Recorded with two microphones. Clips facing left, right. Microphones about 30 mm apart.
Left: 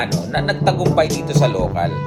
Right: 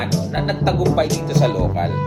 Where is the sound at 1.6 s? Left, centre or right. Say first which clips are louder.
Left 2 dB; centre.